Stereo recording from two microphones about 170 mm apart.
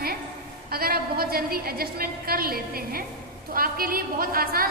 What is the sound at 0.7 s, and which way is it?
A woman's voice, 65° right (ahead or behind).